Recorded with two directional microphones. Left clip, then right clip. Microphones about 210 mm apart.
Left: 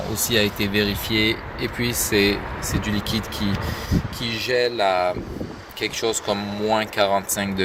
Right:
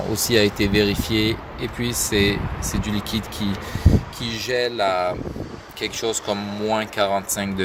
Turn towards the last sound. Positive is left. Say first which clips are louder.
# left 1 dB
turn(degrees=-5)  # may be behind; listen again after turning